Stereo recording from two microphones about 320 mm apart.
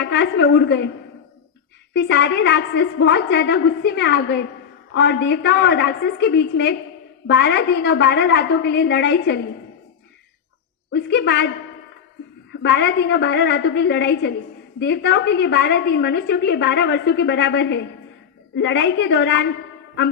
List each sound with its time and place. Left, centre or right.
0.0 s a woman's voice: left
1.9 s a woman's voice: left
10.9 s a woman's voice: left
12.6 s a woman's voice: left